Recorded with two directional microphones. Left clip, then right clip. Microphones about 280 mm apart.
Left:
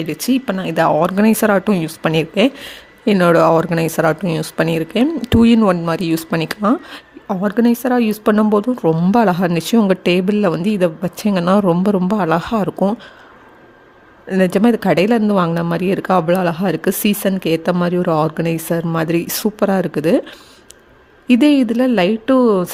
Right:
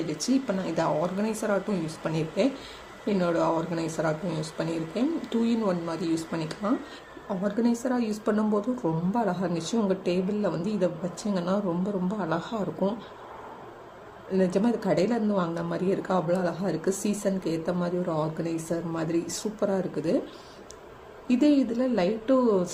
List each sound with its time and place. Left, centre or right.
0.1 s speech: left
14.3 s speech: left
21.2 s speech: left